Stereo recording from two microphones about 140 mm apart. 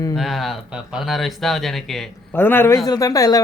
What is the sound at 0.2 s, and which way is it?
Speech, centre (ahead or behind).